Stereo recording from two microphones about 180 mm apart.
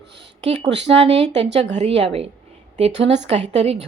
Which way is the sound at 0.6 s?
75° right (ahead or behind).